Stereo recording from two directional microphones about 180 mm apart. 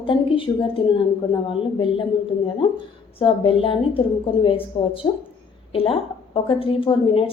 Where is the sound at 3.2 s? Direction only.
30° left (ahead or behind).